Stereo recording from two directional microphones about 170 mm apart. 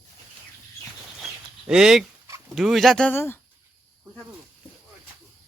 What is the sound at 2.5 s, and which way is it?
Speech, centre (ahead or behind).